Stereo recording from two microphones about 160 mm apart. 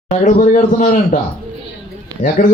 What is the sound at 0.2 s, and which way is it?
A man's voice, 50° left (ahead or behind).